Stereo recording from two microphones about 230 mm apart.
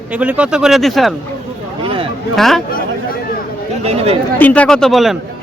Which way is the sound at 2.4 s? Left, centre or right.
Centre.